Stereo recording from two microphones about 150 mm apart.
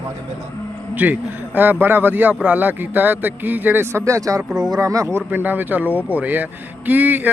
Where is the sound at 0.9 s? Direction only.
10° right (ahead or behind).